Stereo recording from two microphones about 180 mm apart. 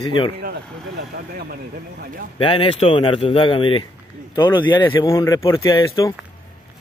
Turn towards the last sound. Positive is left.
turn(degrees=20)  # may be behind; listen again after turning